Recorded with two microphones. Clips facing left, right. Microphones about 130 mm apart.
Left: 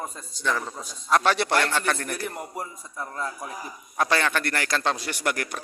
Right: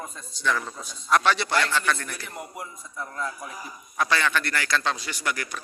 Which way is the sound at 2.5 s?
35° left (ahead or behind).